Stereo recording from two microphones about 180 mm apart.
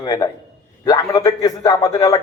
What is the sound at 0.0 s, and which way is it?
A man's voice, 20° left (ahead or behind).